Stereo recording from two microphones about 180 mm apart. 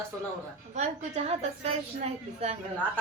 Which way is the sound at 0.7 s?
40° right (ahead or behind).